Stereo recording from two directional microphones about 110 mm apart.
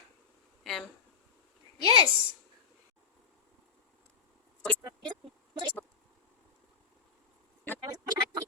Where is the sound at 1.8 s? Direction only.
50° right (ahead or behind).